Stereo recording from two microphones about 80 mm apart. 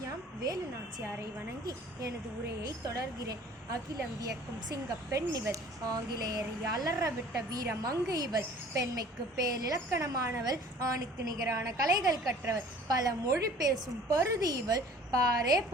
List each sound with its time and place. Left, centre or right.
0.0 s a sound: right
1.6 s a woman's voice: right
10.4 s a woman's voice: right